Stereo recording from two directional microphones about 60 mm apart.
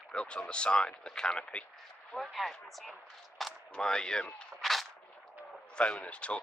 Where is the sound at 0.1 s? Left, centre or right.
Centre.